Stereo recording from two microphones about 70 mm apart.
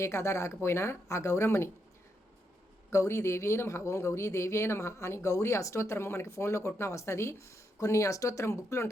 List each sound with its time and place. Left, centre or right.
0.0 s speech: left
2.9 s speech: left